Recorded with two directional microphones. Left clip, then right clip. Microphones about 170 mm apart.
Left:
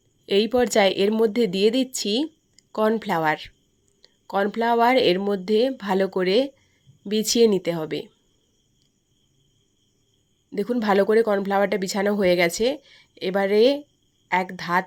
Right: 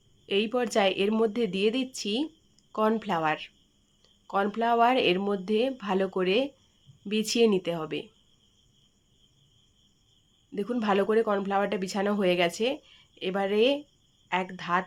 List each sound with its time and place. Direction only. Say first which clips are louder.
0.3 s speech: left 7 dB; 30° left (ahead or behind)
10.5 s speech: left 6 dB; 25° left (ahead or behind)